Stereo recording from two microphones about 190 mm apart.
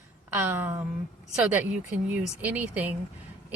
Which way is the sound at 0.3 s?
10° right (ahead or behind).